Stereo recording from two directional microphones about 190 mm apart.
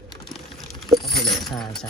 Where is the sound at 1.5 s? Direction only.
Centre (ahead or behind).